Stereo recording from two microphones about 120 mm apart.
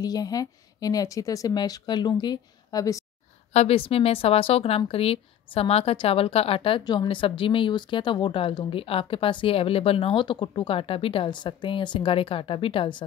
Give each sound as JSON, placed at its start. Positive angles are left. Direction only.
{"t": 0.0, "sound": "a woman's voice", "side_deg": 30}
{"t": 3.5, "sound": "speech", "side_deg": 55}
{"t": 6.8, "sound": "speech", "side_deg": 35}